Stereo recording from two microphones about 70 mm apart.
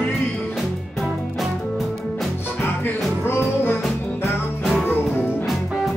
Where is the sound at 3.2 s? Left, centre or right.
Left.